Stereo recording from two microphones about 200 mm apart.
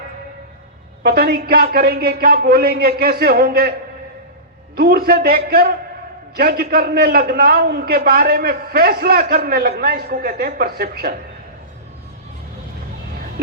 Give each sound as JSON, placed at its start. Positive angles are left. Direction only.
{"t": 1.0, "sound": "a man's voice", "side_deg": -50}
{"t": 4.8, "sound": "a man's voice", "side_deg": -50}